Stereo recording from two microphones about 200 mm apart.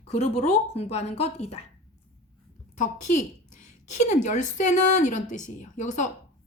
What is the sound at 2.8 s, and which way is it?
A woman's voice, 40° left (ahead or behind).